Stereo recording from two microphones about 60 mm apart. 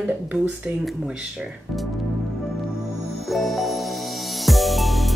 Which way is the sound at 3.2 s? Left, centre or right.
Centre.